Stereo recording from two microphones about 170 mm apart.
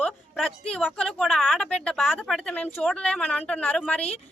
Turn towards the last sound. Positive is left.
turn(degrees=5)  # may be behind; listen again after turning